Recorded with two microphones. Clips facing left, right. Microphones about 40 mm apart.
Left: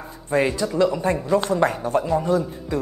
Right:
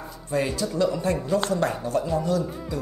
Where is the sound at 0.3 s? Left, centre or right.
Left.